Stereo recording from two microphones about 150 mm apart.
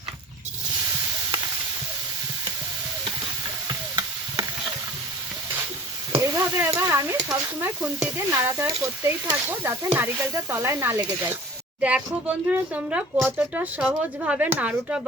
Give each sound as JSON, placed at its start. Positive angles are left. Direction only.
{"t": 3.7, "sound": "stir", "side_deg": -30}
{"t": 6.1, "sound": "speech", "side_deg": -15}
{"t": 8.3, "sound": "speech", "side_deg": -15}